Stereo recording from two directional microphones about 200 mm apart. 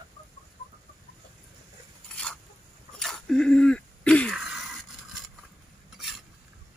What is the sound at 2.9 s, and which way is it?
Throat clearing, centre (ahead or behind).